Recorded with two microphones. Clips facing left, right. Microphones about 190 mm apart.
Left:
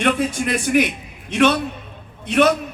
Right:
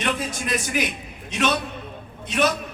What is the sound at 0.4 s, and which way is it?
A man's voice, 60° left (ahead or behind).